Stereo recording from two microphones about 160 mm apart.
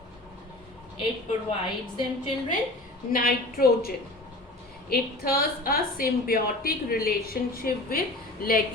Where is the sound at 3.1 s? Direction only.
65° left (ahead or behind).